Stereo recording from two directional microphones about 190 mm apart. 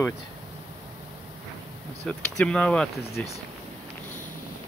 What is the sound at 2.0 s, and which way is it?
Speech, 5° left (ahead or behind).